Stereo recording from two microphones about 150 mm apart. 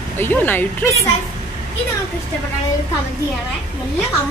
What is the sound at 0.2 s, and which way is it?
Speech, 10° left (ahead or behind).